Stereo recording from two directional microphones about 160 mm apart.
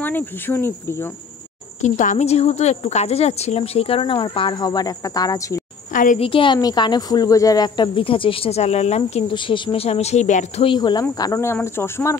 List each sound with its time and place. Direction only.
0.0 s speech: 10° left (ahead or behind)
1.8 s a woman's voice: 50° left (ahead or behind); by 5.6 s 25° left (ahead or behind)
6.1 s a woman's voice: 35° left (ahead or behind)
10.6 s speech: 30° left (ahead or behind)